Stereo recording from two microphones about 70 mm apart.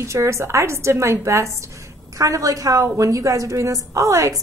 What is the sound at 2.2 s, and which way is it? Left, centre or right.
A woman's voice, right.